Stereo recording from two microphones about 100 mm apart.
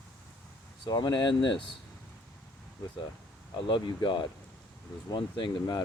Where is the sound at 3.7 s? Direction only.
50° left (ahead or behind).